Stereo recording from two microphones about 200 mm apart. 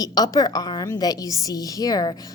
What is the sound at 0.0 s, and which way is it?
A woman's voice, 20° left (ahead or behind).